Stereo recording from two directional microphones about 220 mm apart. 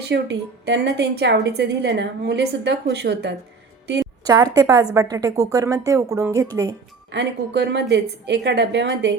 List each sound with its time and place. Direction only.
0.1 s a woman's voice: 50° right (ahead or behind)
4.3 s speech: 15° right (ahead or behind)
7.1 s a woman's voice: 50° right (ahead or behind)